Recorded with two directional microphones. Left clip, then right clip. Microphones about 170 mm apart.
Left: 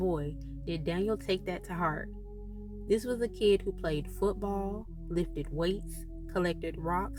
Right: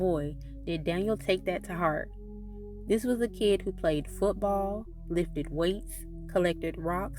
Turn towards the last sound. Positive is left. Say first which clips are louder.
# right 1 dB
turn(degrees=-40)  # may be behind; listen again after turning